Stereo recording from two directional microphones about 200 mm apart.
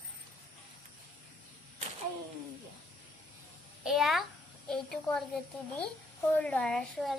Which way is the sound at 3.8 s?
Centre (ahead or behind).